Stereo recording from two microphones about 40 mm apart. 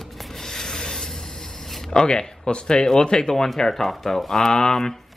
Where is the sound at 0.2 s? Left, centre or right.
Centre.